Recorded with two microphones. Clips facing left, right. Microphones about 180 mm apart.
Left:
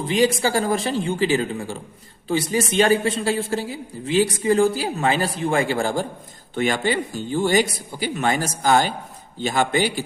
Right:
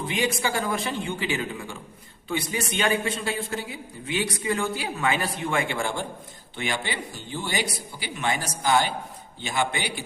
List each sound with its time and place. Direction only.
0.4 s a man's voice: 35° left (ahead or behind)